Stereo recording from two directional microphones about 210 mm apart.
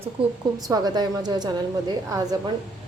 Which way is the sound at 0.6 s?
20° right (ahead or behind).